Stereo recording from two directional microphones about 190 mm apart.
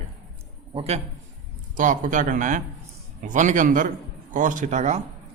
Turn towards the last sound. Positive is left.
turn(degrees=-40)  # may be behind; listen again after turning